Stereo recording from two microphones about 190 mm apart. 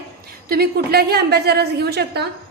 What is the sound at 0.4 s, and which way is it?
A woman's voice, 55° right (ahead or behind).